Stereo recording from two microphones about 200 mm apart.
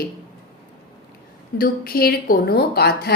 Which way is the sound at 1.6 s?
50° left (ahead or behind).